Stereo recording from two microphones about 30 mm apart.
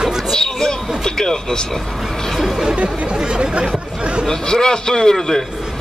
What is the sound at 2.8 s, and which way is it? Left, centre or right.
Speech, right.